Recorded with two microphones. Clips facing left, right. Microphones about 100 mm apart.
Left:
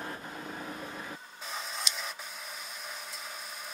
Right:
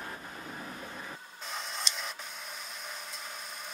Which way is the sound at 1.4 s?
Centre (ahead or behind).